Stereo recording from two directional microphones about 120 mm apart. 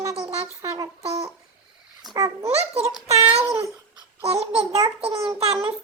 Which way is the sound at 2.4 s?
55° right (ahead or behind).